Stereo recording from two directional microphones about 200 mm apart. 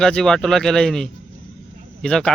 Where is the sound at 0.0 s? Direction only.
5° left (ahead or behind).